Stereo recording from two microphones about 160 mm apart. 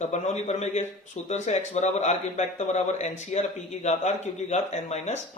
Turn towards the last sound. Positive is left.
turn(degrees=45)  # may be behind; listen again after turning